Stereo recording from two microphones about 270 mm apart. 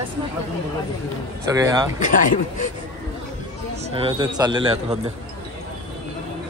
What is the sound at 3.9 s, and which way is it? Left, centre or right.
A man's voice, centre.